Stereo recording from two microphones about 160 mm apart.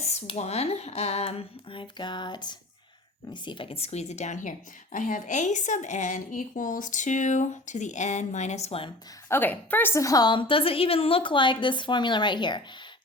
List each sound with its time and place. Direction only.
0.0 s a woman's voice: 45° left (ahead or behind)
9.3 s a woman's voice: 10° left (ahead or behind); by 12.6 s 30° left (ahead or behind)